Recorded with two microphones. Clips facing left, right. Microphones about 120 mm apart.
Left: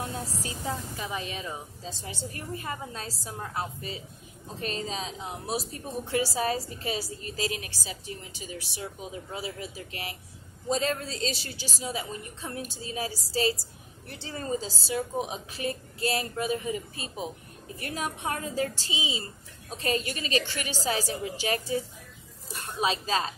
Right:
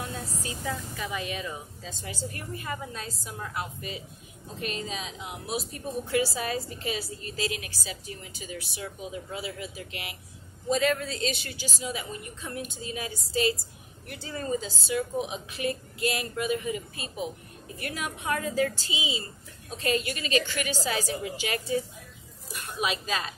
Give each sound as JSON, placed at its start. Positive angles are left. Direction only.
{"t": 0.0, "sound": "a woman's voice", "side_deg": 30}